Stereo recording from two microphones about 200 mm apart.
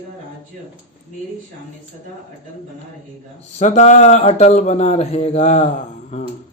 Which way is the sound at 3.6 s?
35° left (ahead or behind).